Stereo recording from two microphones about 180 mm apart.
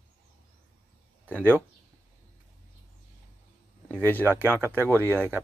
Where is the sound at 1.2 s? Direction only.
10° left (ahead or behind).